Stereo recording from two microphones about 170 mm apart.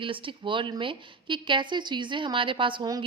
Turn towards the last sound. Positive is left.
turn(degrees=-25)  # may be behind; listen again after turning